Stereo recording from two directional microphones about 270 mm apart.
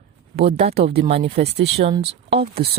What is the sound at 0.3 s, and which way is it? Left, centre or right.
Speech, right.